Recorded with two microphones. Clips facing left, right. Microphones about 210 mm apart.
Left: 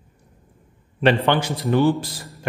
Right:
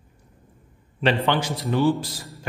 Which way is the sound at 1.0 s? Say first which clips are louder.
Left 4 dB; 55° left (ahead or behind).